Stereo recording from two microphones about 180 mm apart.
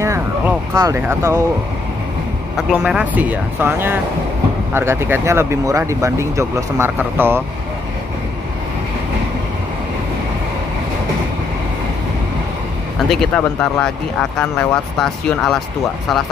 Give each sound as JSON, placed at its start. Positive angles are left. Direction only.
{"t": 0.0, "sound": "a sound", "side_deg": -15}
{"t": 2.5, "sound": "speech", "side_deg": -5}
{"t": 13.1, "sound": "speech", "side_deg": 5}